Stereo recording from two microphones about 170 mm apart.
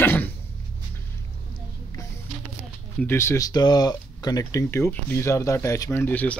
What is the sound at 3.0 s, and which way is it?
Speech, 15° left (ahead or behind).